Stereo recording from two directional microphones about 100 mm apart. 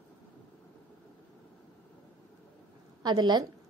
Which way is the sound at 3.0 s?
45° right (ahead or behind).